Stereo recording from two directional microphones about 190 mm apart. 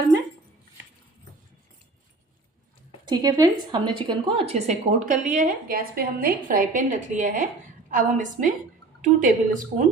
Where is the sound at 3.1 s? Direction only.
20° right (ahead or behind).